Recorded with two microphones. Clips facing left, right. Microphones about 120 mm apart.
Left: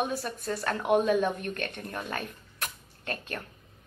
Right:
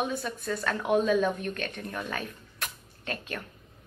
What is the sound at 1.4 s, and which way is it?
Speech, 45° left (ahead or behind).